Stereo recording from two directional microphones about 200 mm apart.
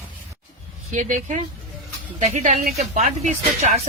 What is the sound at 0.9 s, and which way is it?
A woman's voice, 40° right (ahead or behind).